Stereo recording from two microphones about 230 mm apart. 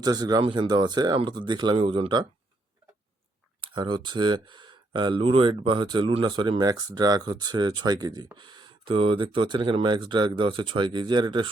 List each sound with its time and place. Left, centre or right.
0.0 s speech: centre
3.6 s speech: centre